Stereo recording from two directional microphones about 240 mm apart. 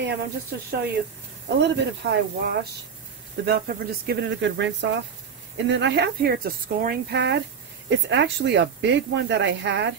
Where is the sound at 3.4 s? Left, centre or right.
Right.